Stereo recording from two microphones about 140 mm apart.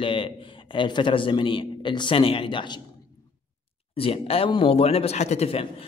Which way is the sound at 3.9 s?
40° left (ahead or behind).